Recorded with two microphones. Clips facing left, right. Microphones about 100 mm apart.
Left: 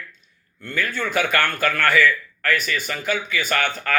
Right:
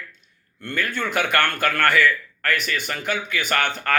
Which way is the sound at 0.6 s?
55° right (ahead or behind).